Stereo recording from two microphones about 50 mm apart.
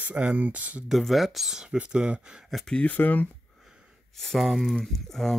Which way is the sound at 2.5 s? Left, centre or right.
Centre.